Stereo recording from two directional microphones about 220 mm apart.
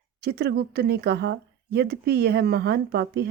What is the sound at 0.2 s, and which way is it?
A woman's voice, 45° right (ahead or behind).